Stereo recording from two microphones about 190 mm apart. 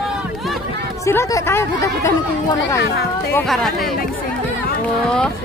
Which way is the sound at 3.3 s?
5° left (ahead or behind).